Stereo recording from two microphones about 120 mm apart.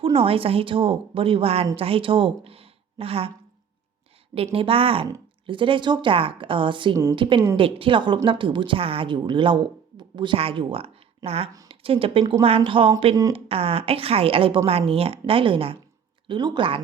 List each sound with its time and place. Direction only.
0.0 s a woman's voice: 50° right (ahead or behind)
4.5 s a woman's voice: 50° right (ahead or behind)
6.9 s a woman's voice: 25° right (ahead or behind)
7.2 s a woman's voice: 45° right (ahead or behind)